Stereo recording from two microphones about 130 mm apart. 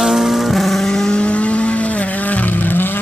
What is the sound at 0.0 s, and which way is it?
Vehicle, centre (ahead or behind).